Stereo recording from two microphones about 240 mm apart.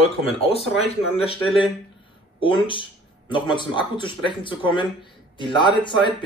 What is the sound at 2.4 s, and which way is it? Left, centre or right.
Speech, left.